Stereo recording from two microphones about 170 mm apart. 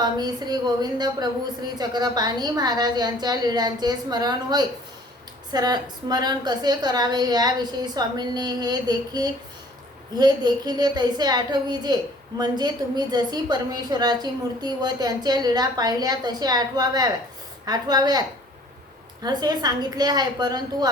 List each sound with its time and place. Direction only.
0.0 s a woman's voice: 25° right (ahead or behind)